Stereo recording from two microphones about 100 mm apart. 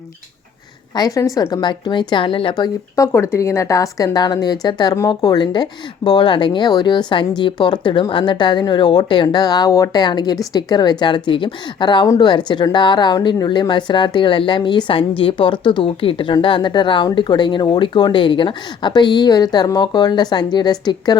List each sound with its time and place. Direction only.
0.9 s a woman's voice: 40° left (ahead or behind)
1.6 s speech: 50° left (ahead or behind)
2.6 s a woman's voice: 35° left (ahead or behind)
10.0 s speech: 45° left (ahead or behind)